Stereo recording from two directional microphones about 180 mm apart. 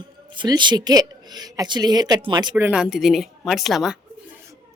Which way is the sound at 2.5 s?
10° right (ahead or behind).